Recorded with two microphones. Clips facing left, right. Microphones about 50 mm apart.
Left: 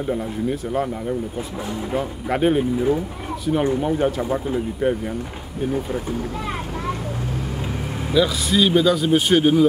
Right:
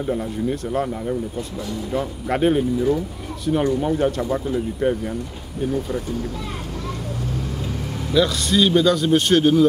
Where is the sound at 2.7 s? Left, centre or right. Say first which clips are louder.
Even; left.